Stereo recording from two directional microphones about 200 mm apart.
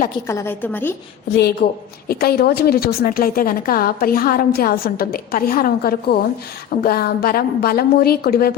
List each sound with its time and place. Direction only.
0.3 s a woman's voice: 10° left (ahead or behind)
1.3 s a woman's voice: 55° left (ahead or behind)